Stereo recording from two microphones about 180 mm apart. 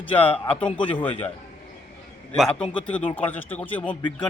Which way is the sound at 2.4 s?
5° left (ahead or behind).